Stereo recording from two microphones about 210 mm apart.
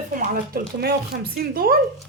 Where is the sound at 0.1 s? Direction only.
40° right (ahead or behind).